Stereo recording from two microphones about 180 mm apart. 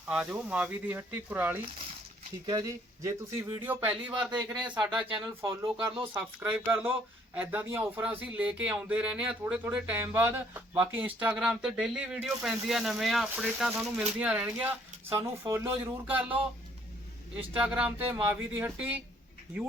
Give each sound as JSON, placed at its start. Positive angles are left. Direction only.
{"t": 0.1, "sound": "speech", "side_deg": -5}
{"t": 3.6, "sound": "speech", "side_deg": -10}
{"t": 5.2, "sound": "speech", "side_deg": -20}
{"t": 17.6, "sound": "speech", "side_deg": -5}